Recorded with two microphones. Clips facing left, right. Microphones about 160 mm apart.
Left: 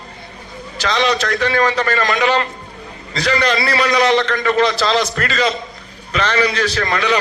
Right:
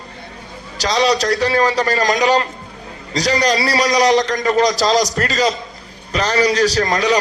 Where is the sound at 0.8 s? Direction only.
35° right (ahead or behind).